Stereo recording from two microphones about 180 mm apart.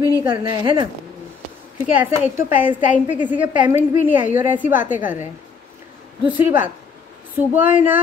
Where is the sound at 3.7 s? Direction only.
10° right (ahead or behind).